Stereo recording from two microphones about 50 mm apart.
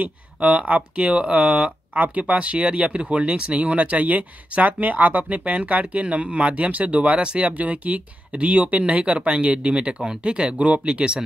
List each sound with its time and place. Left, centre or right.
0.0 s speech: right
2.0 s speech: right